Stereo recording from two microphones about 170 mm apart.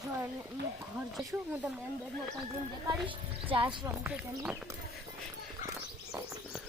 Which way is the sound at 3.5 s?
30° right (ahead or behind).